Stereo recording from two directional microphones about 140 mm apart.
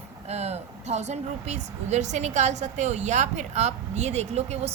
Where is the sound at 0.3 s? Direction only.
50° right (ahead or behind).